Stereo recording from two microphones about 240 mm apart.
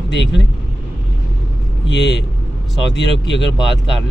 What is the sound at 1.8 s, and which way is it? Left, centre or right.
Speech, left.